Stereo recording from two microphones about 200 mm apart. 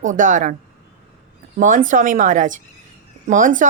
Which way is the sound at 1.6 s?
40° right (ahead or behind).